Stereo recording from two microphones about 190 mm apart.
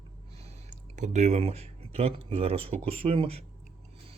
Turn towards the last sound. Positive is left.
turn(degrees=-30)  # may be behind; listen again after turning